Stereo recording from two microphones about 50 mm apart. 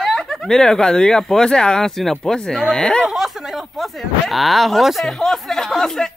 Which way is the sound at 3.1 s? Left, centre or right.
Centre.